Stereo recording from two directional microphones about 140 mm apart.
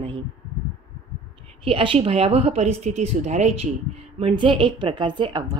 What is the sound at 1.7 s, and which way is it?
A woman's voice, 40° right (ahead or behind).